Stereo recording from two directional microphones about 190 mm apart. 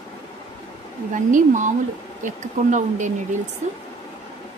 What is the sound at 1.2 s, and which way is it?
Speech, 40° right (ahead or behind).